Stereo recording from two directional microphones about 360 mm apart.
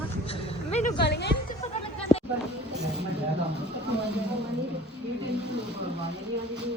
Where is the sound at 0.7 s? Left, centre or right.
Centre.